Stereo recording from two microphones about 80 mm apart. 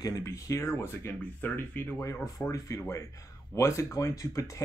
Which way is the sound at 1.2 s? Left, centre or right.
Left.